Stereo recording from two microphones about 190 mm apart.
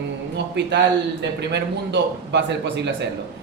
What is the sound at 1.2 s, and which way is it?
A man's voice, 65° right (ahead or behind).